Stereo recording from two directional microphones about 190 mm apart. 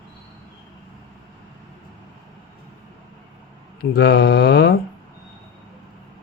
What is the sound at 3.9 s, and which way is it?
Speech, 60° left (ahead or behind).